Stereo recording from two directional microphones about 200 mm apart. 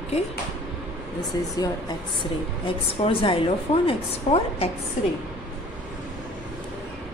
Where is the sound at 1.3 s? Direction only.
20° left (ahead or behind).